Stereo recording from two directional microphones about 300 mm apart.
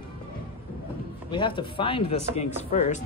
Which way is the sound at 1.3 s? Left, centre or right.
Centre.